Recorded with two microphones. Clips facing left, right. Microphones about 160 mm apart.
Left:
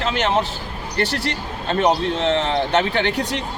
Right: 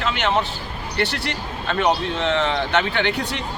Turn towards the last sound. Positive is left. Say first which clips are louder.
# left 2 dB
turn(degrees=40)  # may be behind; listen again after turning